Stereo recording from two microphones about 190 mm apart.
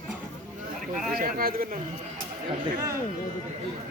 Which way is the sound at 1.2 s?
50° right (ahead or behind).